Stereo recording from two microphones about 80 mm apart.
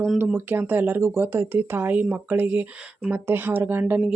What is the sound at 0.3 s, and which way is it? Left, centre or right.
Speech, right.